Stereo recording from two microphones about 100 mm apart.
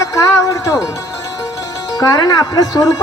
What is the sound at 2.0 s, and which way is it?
Speech, 40° left (ahead or behind).